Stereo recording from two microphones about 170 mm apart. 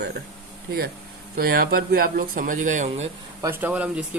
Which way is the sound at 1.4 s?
60° right (ahead or behind).